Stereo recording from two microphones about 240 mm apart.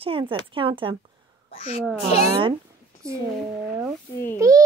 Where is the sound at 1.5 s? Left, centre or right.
Left.